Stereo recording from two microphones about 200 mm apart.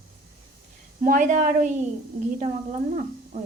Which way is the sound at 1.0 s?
40° right (ahead or behind).